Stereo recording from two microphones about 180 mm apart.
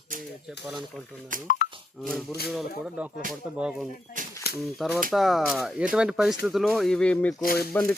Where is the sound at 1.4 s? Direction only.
50° left (ahead or behind).